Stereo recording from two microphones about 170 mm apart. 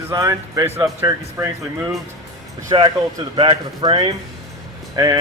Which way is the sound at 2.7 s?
25° right (ahead or behind).